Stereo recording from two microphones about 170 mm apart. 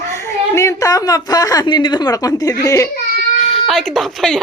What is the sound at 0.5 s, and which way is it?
Speech, 15° left (ahead or behind).